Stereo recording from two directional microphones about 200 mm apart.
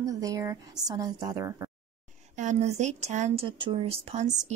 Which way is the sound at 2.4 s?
35° right (ahead or behind).